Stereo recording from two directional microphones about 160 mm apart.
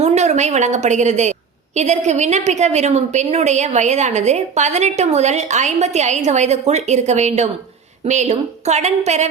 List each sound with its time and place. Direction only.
0.0 s a woman's voice: 45° right (ahead or behind)